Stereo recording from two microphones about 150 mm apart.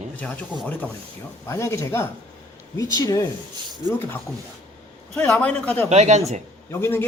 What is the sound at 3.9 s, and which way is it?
Speech, 15° left (ahead or behind).